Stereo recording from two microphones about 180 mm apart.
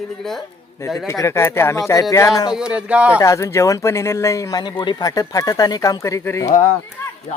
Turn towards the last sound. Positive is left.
turn(degrees=15)  # may be behind; listen again after turning